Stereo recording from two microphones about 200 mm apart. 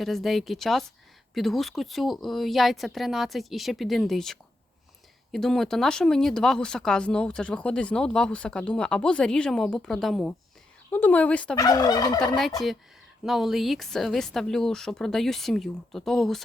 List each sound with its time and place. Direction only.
0.0 s speech: centre (ahead or behind)
11.5 s fowl: 20° left (ahead or behind)
12.4 s speech: centre (ahead or behind)